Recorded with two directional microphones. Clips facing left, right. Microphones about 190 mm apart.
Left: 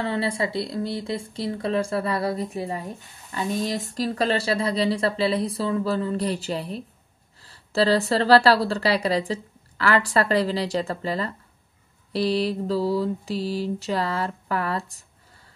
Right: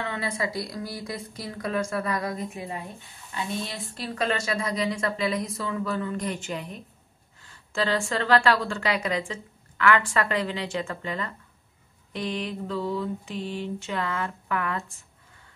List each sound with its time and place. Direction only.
0.0 s speech: 30° left (ahead or behind)